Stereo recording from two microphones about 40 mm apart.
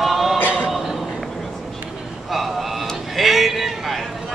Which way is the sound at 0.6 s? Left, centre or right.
Centre.